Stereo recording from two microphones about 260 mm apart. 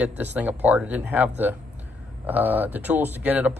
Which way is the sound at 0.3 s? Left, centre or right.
Centre.